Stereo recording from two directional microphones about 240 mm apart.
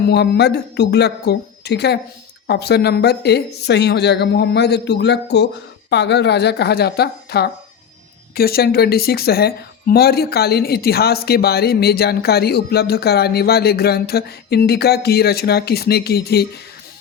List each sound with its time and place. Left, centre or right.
0.0 s speech: left